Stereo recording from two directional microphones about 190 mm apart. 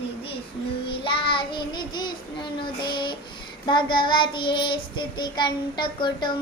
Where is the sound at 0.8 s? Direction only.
25° left (ahead or behind).